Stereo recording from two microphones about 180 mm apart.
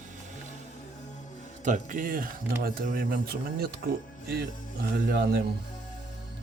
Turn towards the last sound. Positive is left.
turn(degrees=-60)  # may be behind; listen again after turning